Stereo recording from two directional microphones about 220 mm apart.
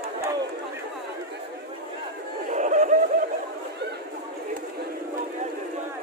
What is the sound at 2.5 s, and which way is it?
Snicker, 35° right (ahead or behind).